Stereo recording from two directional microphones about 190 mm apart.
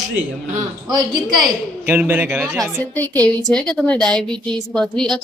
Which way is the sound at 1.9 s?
10° right (ahead or behind).